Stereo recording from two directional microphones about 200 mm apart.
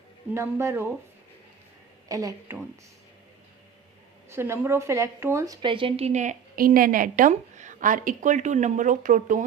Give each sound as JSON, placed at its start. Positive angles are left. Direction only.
{"t": 0.3, "sound": "speech", "side_deg": -15}
{"t": 2.0, "sound": "speech", "side_deg": -15}
{"t": 4.3, "sound": "a woman's voice", "side_deg": -10}